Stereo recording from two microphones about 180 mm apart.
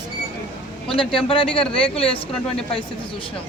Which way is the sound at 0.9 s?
30° left (ahead or behind).